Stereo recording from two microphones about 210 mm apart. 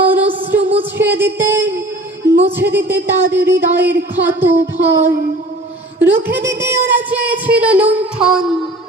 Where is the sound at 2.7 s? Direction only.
10° right (ahead or behind).